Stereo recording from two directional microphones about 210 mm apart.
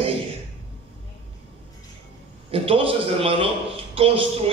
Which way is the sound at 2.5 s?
25° right (ahead or behind).